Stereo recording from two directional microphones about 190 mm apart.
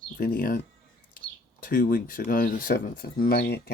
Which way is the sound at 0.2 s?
45° left (ahead or behind).